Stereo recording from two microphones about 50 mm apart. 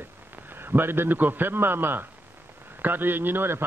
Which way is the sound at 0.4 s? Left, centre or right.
Right.